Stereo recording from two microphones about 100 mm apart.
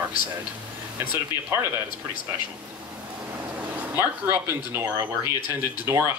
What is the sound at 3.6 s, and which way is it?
Speech, 20° right (ahead or behind).